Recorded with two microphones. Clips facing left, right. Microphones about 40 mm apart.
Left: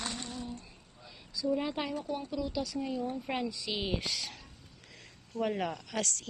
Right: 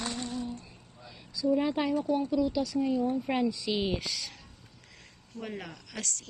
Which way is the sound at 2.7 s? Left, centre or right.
Right.